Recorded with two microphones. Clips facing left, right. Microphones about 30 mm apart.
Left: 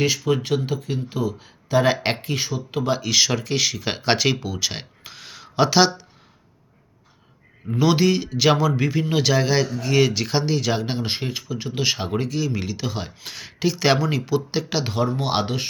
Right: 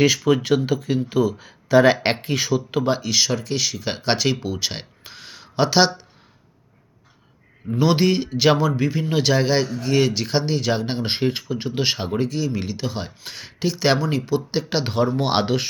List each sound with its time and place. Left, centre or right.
0.4 s speech: right
1.8 s speech: right
2.3 s speech: right
3.0 s speech: centre
4.4 s a man's voice: centre
4.7 s a sound: centre
7.8 s a man's voice: centre
11.0 s speech: right
11.7 s speech: right
12.1 s a man's voice: centre
14.8 s speech: right